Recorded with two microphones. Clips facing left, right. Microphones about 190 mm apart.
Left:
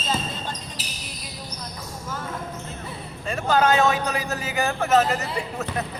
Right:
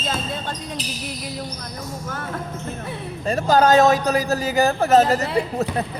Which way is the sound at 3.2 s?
40° right (ahead or behind).